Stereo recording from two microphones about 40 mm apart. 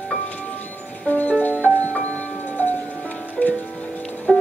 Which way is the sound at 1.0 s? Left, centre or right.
Left.